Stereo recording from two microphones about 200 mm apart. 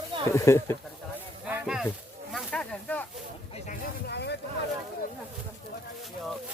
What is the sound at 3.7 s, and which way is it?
Speech, 55° left (ahead or behind).